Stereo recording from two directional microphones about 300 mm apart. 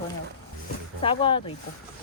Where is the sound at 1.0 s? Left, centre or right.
Centre.